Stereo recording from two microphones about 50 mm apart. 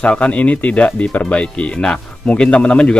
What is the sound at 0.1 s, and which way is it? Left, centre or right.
A man's voice, left.